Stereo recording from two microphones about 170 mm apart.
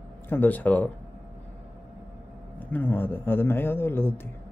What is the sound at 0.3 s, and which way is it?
Speech, 10° left (ahead or behind).